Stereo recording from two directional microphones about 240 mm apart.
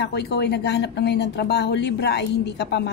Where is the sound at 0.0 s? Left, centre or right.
Left.